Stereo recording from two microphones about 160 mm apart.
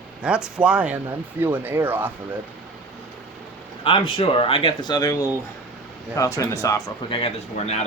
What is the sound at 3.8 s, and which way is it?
Speech, 35° left (ahead or behind).